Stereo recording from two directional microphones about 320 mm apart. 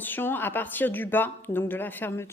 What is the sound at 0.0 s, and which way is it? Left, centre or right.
A woman's voice, centre.